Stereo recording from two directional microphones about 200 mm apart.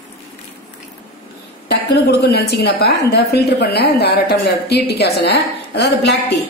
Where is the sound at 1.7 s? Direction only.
55° left (ahead or behind).